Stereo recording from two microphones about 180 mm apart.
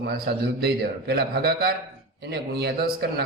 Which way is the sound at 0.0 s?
60° right (ahead or behind).